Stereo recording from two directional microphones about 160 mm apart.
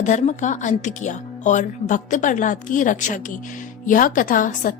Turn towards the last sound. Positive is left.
turn(degrees=60)  # may be behind; listen again after turning